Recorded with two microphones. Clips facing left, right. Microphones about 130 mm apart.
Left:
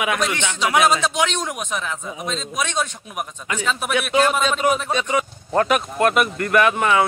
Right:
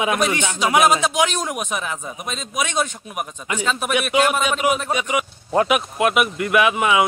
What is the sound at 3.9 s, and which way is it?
A man's voice, 15° right (ahead or behind).